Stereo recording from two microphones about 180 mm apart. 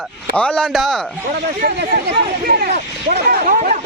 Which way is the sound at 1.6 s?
50° right (ahead or behind).